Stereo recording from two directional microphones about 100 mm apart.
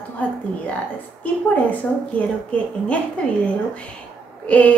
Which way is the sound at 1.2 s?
15° left (ahead or behind).